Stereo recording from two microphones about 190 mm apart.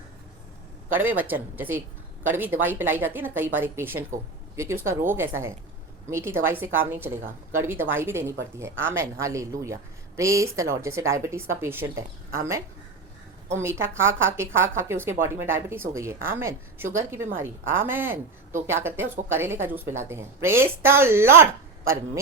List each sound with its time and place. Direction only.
0.9 s a woman's voice: 10° right (ahead or behind)